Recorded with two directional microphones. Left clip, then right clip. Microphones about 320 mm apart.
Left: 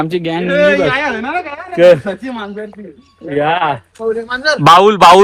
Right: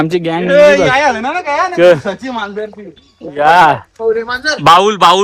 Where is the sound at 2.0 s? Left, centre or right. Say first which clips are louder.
Right 3 dB; right.